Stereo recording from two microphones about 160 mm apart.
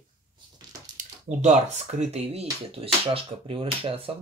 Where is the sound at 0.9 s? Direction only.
50° right (ahead or behind).